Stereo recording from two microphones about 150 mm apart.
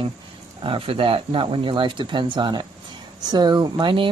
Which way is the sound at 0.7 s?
35° right (ahead or behind).